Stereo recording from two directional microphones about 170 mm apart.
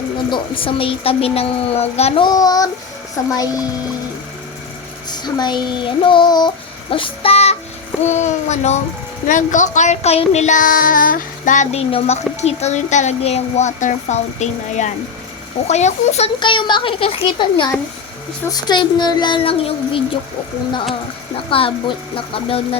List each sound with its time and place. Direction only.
0.3 s speech: 30° left (ahead or behind)
5.0 s speech: 25° left (ahead or behind)
6.9 s child singing: 30° left (ahead or behind)
15.6 s speech: 40° left (ahead or behind)
21.5 s speech: 30° left (ahead or behind)